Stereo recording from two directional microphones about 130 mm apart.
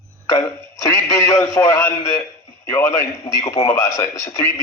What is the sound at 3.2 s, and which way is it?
A man's voice, 25° left (ahead or behind).